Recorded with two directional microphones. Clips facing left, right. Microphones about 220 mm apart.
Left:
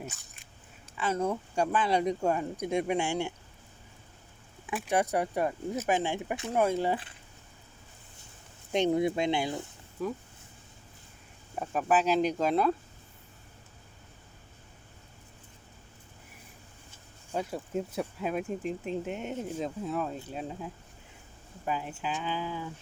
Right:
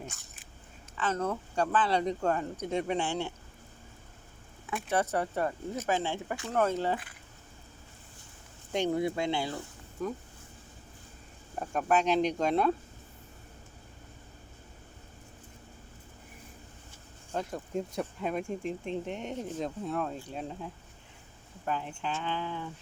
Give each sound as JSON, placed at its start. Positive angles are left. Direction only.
{"t": 0.0, "sound": "biting", "side_deg": 0}
{"t": 0.9, "sound": "speech", "side_deg": 10}
{"t": 4.7, "sound": "speech", "side_deg": 15}
{"t": 8.7, "sound": "speech", "side_deg": 20}
{"t": 10.0, "sound": "speech", "side_deg": 5}
{"t": 11.6, "sound": "speech", "side_deg": 5}
{"t": 17.3, "sound": "speech", "side_deg": 5}